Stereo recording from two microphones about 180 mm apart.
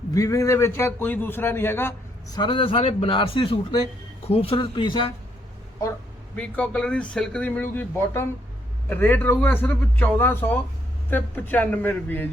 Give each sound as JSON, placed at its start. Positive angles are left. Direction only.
{"t": 0.1, "sound": "a man's voice", "side_deg": 15}
{"t": 6.3, "sound": "a man's voice", "side_deg": 5}